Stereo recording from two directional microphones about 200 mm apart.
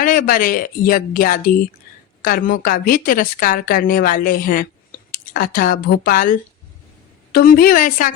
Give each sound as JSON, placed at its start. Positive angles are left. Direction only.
{"t": 0.0, "sound": "a woman's voice", "side_deg": 45}
{"t": 7.3, "sound": "a woman's voice", "side_deg": 45}